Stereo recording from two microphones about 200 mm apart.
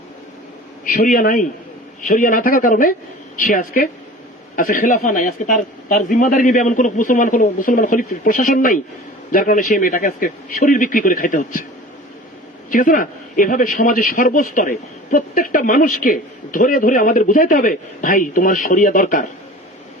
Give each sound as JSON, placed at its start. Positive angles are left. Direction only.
{"t": 0.9, "sound": "a man's voice", "side_deg": 40}
{"t": 12.7, "sound": "a man's voice", "side_deg": 40}